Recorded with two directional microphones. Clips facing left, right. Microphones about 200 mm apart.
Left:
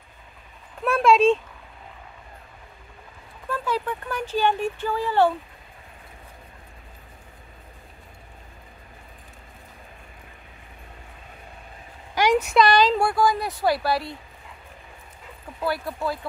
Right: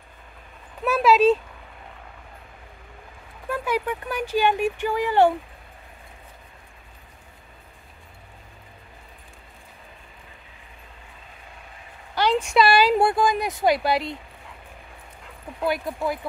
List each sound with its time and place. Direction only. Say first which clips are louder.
0.8 s speech: even; 5° right (ahead or behind)
3.4 s speech: right 1 dB; 15° right (ahead or behind)
12.4 s speech: even; 5° right (ahead or behind)
13.0 s speech: right 1 dB; 20° right (ahead or behind)
15.6 s speech: right 2 dB; 15° right (ahead or behind)